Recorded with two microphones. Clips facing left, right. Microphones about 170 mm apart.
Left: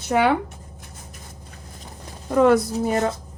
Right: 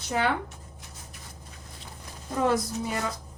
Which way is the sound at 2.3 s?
70° left (ahead or behind).